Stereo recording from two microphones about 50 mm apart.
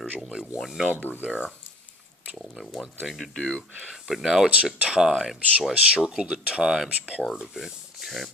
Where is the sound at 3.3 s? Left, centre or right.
Left.